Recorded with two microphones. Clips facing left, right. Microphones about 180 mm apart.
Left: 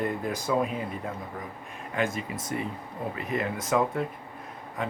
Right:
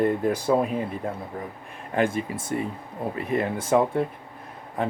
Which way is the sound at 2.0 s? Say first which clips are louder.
Right 5 dB; 30° right (ahead or behind).